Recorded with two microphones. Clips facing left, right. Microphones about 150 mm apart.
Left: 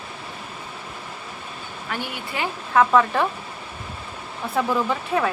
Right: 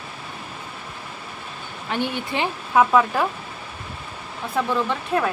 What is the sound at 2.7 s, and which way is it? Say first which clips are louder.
Speech: even; 5° right (ahead or behind).